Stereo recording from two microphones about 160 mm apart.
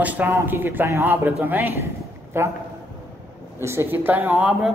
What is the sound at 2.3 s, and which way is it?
Speech, 15° right (ahead or behind).